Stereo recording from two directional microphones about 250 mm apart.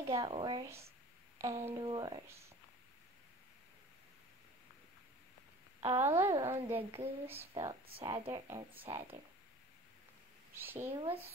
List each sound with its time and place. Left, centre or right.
0.1 s speech: centre
5.9 s speech: centre
6.9 s speech: right
7.2 s speech: centre
8.8 s speech: right
10.5 s speech: centre